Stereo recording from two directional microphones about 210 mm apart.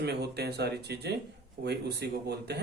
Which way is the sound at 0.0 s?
50° right (ahead or behind).